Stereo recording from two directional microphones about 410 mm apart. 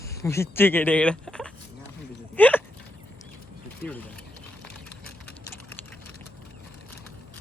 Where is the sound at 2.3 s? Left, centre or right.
Centre.